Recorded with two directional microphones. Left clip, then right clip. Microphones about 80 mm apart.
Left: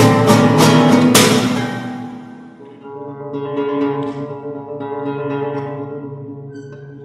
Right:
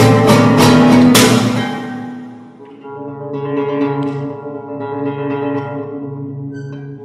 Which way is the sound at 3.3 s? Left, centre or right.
Right.